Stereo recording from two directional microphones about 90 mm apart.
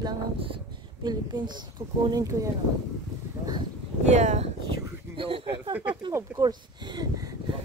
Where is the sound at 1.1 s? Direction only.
55° right (ahead or behind).